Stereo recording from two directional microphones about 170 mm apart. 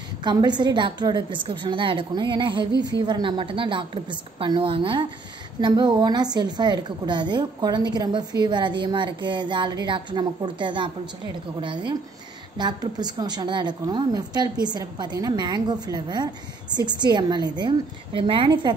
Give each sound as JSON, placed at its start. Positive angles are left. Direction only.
{"t": 0.2, "sound": "a woman's voice", "side_deg": -25}